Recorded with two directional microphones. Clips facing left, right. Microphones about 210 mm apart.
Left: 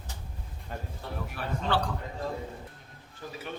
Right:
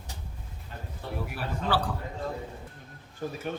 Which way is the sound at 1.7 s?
5° right (ahead or behind).